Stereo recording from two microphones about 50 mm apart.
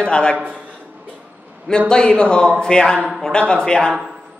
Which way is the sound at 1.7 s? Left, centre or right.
Centre.